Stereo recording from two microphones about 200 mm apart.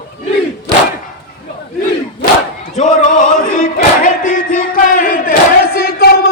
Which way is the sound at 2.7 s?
40° left (ahead or behind).